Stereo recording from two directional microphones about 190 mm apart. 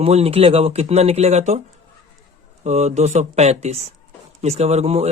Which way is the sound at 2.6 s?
35° right (ahead or behind).